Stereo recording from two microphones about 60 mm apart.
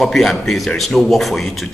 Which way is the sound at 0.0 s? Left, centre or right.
Centre.